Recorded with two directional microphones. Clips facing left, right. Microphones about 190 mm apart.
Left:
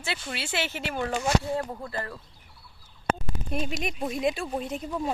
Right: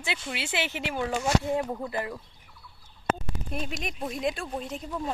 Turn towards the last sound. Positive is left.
turn(degrees=5)  # may be behind; listen again after turning